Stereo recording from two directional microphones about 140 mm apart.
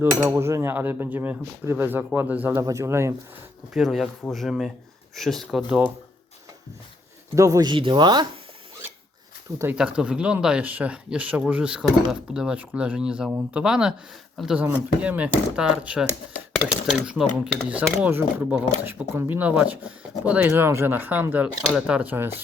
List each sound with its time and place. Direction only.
0.0 s speech: 15° right (ahead or behind)
3.8 s speech: centre (ahead or behind)
7.3 s speech: 25° right (ahead or behind)
9.7 s speech: 5° right (ahead or behind)
17.7 s speech: 10° right (ahead or behind)